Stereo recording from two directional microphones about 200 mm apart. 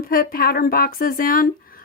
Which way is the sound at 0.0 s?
45° left (ahead or behind).